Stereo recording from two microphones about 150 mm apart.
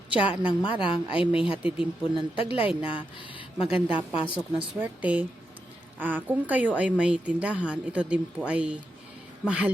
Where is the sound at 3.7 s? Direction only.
10° right (ahead or behind).